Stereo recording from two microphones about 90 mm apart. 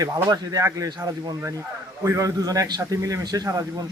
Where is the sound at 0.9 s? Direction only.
50° right (ahead or behind).